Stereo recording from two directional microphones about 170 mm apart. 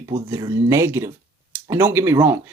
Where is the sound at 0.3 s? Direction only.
20° right (ahead or behind).